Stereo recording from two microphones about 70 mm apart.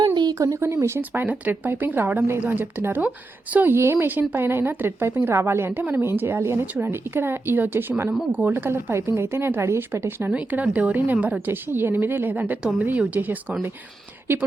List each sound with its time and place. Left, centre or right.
0.1 s a sound: right
0.3 s a woman's voice: right
10.3 s a woman's voice: centre